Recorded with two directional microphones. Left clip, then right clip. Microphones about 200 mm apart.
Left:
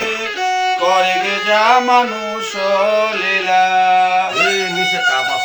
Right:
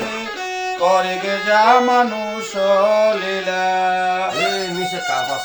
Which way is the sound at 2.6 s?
60° right (ahead or behind).